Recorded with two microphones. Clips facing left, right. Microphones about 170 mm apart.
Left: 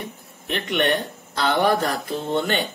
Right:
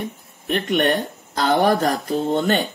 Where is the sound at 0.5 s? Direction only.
45° right (ahead or behind).